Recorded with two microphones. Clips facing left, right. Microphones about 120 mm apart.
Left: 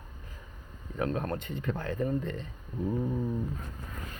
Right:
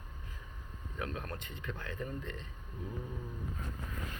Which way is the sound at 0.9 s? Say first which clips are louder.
Left 10 dB; 40° left (ahead or behind).